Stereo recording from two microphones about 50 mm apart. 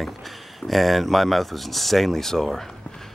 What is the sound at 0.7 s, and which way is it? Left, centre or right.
Speech, centre.